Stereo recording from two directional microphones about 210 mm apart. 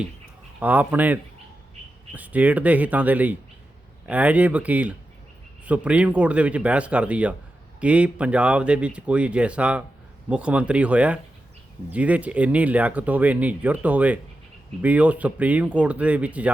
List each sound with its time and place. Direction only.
0.6 s speech: 5° right (ahead or behind)